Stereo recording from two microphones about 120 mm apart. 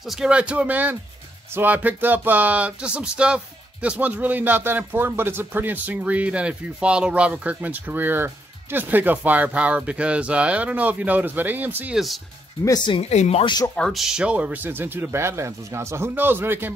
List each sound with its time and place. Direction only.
0.0 s speech: 5° right (ahead or behind)
12.6 s speech: 35° left (ahead or behind)
13.1 s speech: 65° left (ahead or behind)
13.7 s speech: centre (ahead or behind); by 16.7 s 20° right (ahead or behind)